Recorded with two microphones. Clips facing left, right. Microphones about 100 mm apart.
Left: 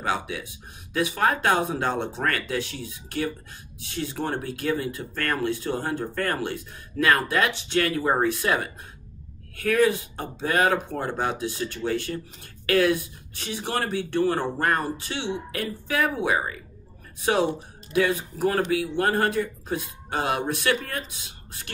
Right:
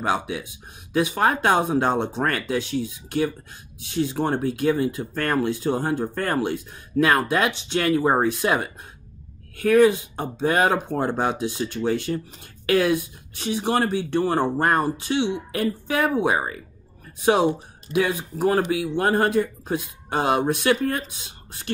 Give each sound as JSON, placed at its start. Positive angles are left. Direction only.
{"t": 0.0, "sound": "speech", "side_deg": -20}